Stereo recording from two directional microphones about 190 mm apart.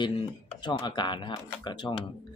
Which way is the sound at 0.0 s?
25° left (ahead or behind).